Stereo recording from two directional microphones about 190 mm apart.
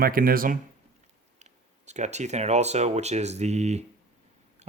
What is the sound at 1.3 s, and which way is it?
Speech, 35° right (ahead or behind).